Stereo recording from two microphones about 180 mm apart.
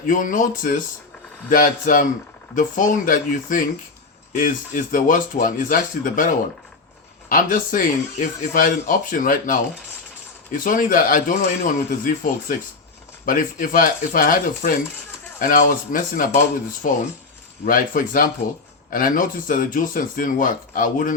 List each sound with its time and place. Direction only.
0.0 s speech: 45° left (ahead or behind)